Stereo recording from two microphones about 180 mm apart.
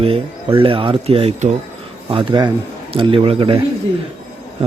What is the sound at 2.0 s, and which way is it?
Speech, 25° right (ahead or behind).